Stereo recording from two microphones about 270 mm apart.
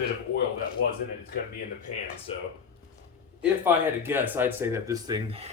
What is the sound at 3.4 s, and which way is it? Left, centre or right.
Speech, centre.